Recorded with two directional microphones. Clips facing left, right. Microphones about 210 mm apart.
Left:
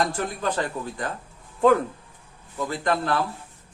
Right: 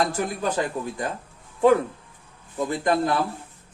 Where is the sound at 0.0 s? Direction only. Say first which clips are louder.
Right 1 dB; 10° right (ahead or behind).